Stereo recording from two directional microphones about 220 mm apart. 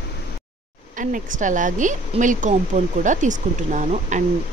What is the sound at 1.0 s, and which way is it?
Speech, 35° right (ahead or behind).